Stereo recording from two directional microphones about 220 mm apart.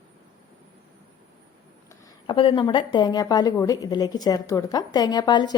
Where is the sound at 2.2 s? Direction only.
25° left (ahead or behind).